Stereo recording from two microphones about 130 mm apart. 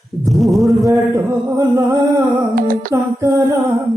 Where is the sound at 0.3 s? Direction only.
Centre (ahead or behind).